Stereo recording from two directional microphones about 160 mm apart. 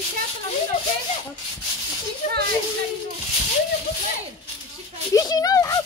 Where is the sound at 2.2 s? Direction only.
50° left (ahead or behind).